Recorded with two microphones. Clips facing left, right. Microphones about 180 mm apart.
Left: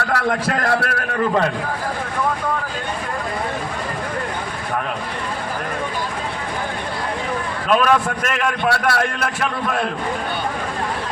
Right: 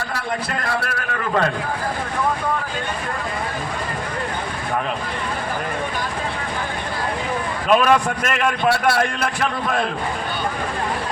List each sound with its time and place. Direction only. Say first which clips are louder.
0.1 s a man's voice: left 6 dB; 85° left
7.7 s a man's voice: right 1 dB; centre (ahead or behind)